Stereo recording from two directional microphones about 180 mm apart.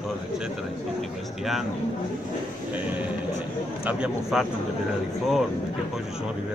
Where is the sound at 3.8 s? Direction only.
5° right (ahead or behind).